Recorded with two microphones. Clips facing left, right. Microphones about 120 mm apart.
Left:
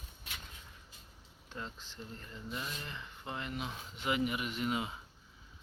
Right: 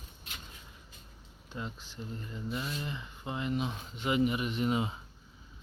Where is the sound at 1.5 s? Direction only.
15° right (ahead or behind).